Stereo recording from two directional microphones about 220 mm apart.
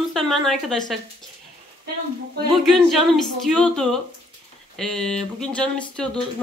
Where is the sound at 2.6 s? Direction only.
Centre (ahead or behind).